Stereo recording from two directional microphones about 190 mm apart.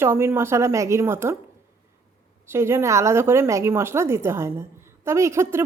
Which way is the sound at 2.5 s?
15° right (ahead or behind).